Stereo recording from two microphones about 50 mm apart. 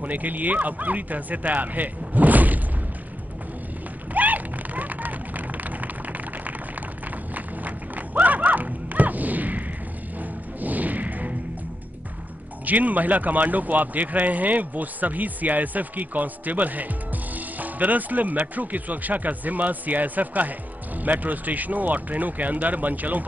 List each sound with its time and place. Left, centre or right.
0.0 s a man's voice: right
4.1 s a sound: right
10.6 s smash: right
12.6 s a man's voice: right